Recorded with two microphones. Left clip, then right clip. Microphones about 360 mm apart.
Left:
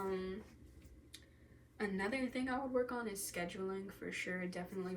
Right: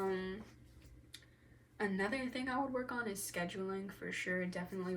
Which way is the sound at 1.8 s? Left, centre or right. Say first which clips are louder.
Right 2 dB; centre.